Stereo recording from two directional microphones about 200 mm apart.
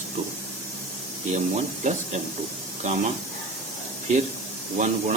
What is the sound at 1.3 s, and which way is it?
Speech, 35° right (ahead or behind).